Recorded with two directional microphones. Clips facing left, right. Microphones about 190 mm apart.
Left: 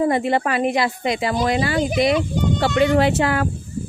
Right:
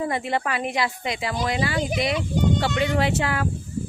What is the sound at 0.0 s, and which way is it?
Speech, 40° left (ahead or behind).